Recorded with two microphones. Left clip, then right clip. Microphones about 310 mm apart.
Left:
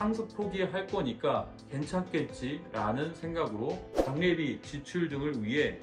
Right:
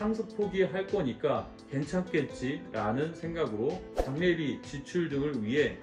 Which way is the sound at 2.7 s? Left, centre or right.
Centre.